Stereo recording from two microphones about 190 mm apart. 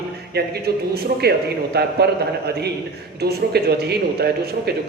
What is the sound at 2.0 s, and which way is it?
A man's voice, 60° right (ahead or behind).